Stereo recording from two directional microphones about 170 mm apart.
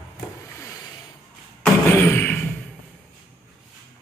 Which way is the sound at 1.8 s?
15° left (ahead or behind).